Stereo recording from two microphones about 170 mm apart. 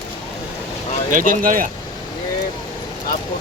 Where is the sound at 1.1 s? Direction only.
50° right (ahead or behind).